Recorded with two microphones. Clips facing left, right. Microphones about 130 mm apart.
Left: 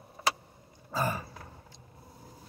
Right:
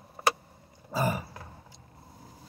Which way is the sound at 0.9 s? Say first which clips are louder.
Right 2 dB; 10° right (ahead or behind).